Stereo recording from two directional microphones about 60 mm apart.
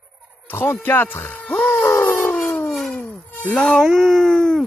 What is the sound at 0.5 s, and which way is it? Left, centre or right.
Speech, left.